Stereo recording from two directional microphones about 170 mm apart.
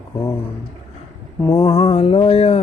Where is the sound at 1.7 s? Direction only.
35° left (ahead or behind).